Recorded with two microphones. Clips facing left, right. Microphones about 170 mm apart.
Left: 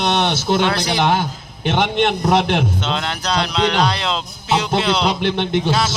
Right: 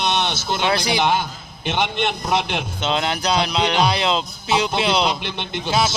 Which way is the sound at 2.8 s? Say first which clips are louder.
Right 1 dB; 10° right (ahead or behind).